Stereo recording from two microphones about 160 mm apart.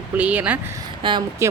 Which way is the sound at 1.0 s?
30° right (ahead or behind).